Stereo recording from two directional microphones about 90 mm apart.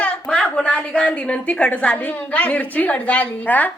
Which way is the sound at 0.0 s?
10° left (ahead or behind).